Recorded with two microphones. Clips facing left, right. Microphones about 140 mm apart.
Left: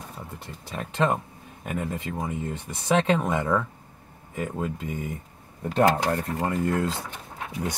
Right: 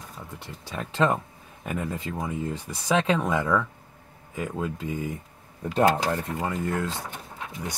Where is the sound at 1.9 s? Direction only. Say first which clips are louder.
Even; 25° left (ahead or behind).